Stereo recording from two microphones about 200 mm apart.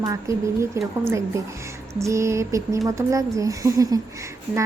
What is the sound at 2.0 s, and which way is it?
Speech, 15° right (ahead or behind).